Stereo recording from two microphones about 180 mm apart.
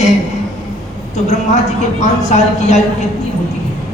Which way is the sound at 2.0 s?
40° left (ahead or behind).